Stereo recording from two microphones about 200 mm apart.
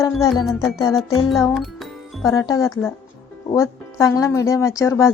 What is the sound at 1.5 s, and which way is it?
Music, centre (ahead or behind).